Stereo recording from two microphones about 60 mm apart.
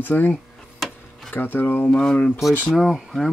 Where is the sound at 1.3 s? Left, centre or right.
Left.